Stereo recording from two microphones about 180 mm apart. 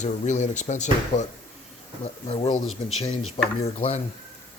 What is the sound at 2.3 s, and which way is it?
Speech, 35° left (ahead or behind).